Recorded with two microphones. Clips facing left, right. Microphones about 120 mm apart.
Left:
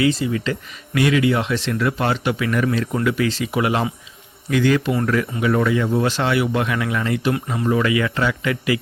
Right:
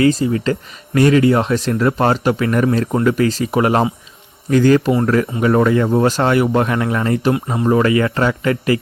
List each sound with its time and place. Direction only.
0.0 s speech: 40° right (ahead or behind)